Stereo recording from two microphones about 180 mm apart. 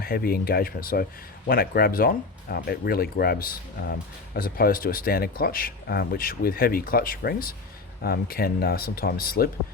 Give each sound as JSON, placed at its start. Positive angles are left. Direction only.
{"t": 0.0, "sound": "speech", "side_deg": 55}